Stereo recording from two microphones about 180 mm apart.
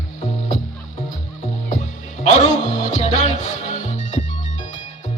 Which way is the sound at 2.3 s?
40° left (ahead or behind).